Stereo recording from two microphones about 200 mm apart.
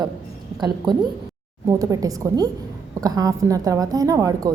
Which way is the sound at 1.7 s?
15° right (ahead or behind).